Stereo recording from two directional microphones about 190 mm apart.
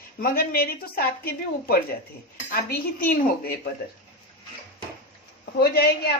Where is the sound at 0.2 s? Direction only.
50° left (ahead or behind).